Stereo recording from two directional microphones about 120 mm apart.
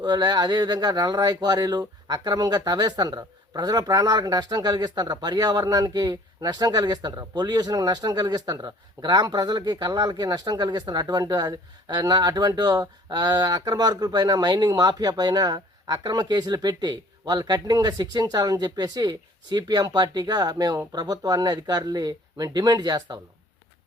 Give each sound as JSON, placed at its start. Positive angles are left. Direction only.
{"t": 0.0, "sound": "speech", "side_deg": -35}